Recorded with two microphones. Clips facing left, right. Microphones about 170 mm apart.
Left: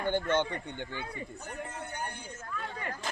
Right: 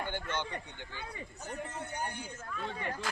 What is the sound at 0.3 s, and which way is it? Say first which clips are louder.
Speech: left 8 dB; 55° left (ahead or behind).